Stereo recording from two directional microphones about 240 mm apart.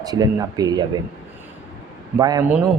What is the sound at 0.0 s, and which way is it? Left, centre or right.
Speech, centre.